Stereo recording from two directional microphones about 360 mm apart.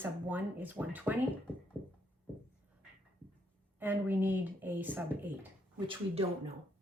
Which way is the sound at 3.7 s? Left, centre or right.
Centre.